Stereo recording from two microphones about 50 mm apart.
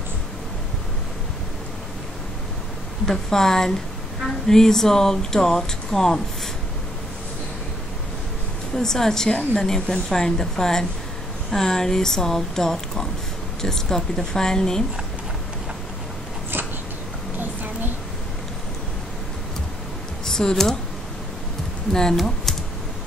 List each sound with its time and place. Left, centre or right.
3.1 s speech: centre
8.7 s speech: centre
20.2 s speech: centre
22.1 s speech: centre